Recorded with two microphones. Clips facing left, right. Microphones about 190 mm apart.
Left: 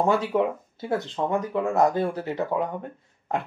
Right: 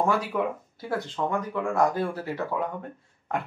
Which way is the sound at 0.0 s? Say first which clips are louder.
Left 3 dB; 25° left (ahead or behind).